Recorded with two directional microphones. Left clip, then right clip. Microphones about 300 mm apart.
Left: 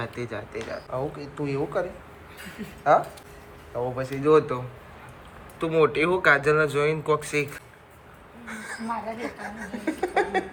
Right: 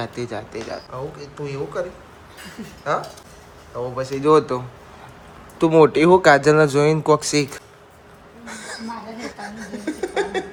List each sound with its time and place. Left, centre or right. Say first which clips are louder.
0.0 s speech: right 5 dB; centre
0.9 s speech: even; centre
3.8 s speech: right 3 dB; centre
8.4 s a sound: even; centre